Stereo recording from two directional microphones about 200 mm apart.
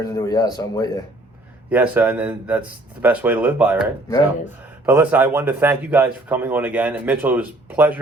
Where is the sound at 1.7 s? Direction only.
10° right (ahead or behind).